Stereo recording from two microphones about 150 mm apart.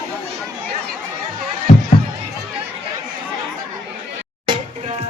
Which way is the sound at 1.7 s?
55° left (ahead or behind).